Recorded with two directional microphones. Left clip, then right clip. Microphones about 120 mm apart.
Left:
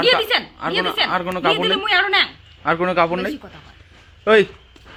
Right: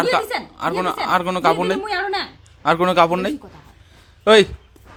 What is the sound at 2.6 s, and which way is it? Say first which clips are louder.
Speech: right 2 dB; 40° right (ahead or behind).